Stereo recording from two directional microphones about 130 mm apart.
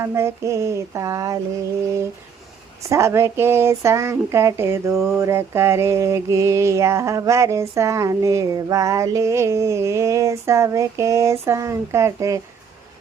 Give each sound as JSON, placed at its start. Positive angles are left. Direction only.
{"t": 0.0, "sound": "speech", "side_deg": -20}
{"t": 2.9, "sound": "speech", "side_deg": -20}